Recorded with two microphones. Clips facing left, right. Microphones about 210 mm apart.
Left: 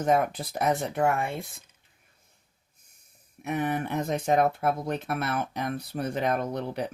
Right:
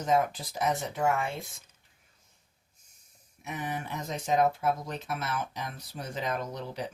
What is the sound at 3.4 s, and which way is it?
Speech, 60° left (ahead or behind).